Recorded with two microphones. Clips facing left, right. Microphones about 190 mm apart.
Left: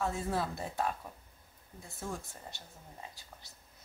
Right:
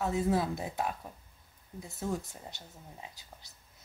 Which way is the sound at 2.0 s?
15° right (ahead or behind).